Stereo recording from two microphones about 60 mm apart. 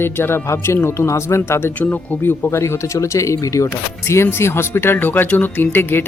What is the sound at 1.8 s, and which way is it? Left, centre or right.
Speech, left.